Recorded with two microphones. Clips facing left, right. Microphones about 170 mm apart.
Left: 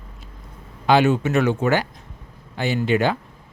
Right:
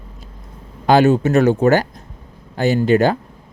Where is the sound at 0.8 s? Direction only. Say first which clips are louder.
Right 4 dB; 40° right (ahead or behind).